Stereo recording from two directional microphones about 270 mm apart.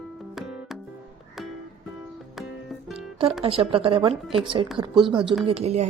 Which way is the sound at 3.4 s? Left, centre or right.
Right.